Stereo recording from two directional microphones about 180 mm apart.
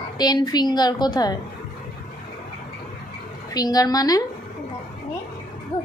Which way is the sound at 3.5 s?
20° left (ahead or behind).